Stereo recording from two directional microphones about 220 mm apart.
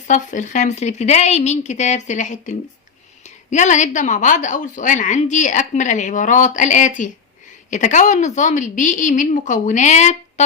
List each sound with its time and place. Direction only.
0.1 s a woman's voice: 35° left (ahead or behind)